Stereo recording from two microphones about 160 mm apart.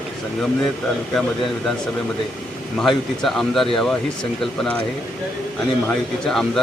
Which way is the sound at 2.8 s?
Centre (ahead or behind).